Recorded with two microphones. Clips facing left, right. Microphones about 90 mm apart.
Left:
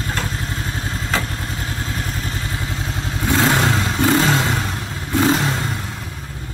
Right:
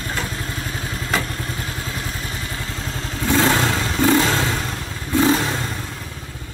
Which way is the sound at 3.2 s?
20° left (ahead or behind).